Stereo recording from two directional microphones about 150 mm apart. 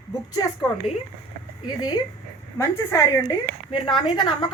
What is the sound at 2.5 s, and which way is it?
A woman's voice, 25° left (ahead or behind).